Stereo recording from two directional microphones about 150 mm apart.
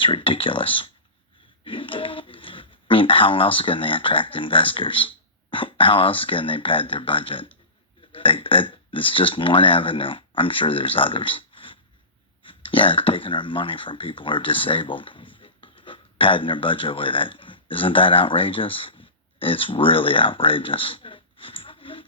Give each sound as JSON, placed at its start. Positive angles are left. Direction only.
{"t": 0.0, "sound": "speech", "side_deg": 35}